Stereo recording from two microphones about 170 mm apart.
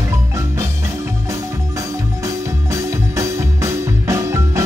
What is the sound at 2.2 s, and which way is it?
Music, 20° right (ahead or behind).